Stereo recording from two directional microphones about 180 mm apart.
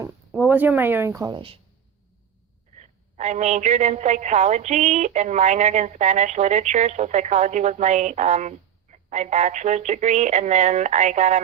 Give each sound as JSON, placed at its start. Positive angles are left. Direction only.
{"t": 0.3, "sound": "speech", "side_deg": -10}
{"t": 2.7, "sound": "a woman's voice", "side_deg": -40}